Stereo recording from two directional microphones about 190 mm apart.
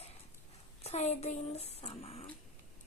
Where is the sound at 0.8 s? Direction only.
35° left (ahead or behind).